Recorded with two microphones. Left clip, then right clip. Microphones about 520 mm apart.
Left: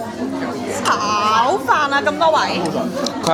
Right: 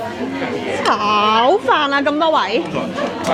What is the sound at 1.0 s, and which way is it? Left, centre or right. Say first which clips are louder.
Speech: right 3 dB; right.